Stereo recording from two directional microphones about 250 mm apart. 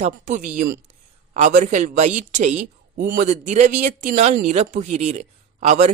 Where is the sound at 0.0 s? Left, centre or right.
Right.